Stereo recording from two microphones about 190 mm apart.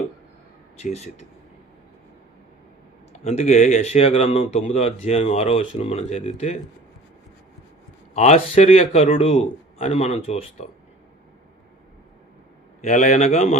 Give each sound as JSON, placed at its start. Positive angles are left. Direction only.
{"t": 0.8, "sound": "a man's voice", "side_deg": 35}
{"t": 3.1, "sound": "a man's voice", "side_deg": 35}
{"t": 8.1, "sound": "a man's voice", "side_deg": 35}
{"t": 12.8, "sound": "a man's voice", "side_deg": 40}